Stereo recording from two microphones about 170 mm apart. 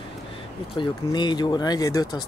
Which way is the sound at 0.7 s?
25° left (ahead or behind).